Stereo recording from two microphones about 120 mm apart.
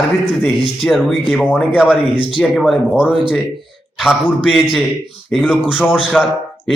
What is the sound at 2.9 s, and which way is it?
Speech, 10° right (ahead or behind).